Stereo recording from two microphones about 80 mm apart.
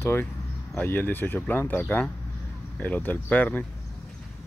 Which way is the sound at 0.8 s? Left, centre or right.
Left.